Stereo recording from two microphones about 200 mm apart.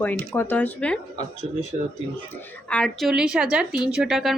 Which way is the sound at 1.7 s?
30° right (ahead or behind).